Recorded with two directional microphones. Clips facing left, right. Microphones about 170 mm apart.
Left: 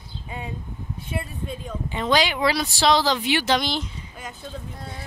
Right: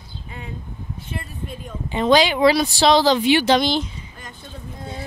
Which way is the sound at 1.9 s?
25° right (ahead or behind).